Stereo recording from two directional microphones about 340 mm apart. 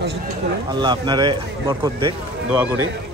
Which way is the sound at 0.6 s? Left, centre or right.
Centre.